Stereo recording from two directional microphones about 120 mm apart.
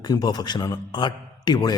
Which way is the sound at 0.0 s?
35° left (ahead or behind).